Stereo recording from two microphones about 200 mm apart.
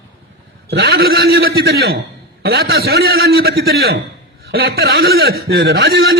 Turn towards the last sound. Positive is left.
turn(degrees=-55)  # may be behind; listen again after turning